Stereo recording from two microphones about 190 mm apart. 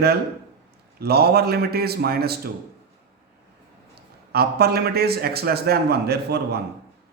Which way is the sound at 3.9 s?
55° right (ahead or behind).